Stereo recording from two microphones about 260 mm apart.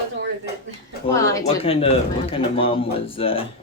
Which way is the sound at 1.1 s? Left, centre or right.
Centre.